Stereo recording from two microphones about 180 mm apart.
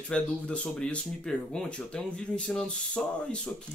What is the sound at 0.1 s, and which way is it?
Speech, 5° left (ahead or behind).